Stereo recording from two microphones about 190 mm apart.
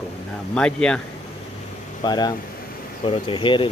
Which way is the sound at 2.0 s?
20° left (ahead or behind).